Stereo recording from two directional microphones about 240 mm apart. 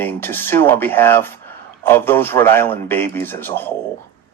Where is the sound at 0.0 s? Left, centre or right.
Centre.